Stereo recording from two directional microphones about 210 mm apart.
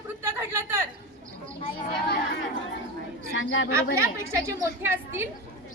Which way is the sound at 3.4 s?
65° left (ahead or behind).